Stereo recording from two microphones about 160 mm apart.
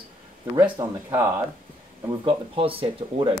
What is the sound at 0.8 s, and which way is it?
Speech, 20° right (ahead or behind).